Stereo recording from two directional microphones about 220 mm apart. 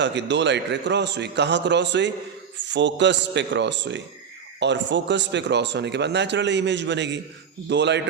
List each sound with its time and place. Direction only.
0.0 s speech: 55° right (ahead or behind)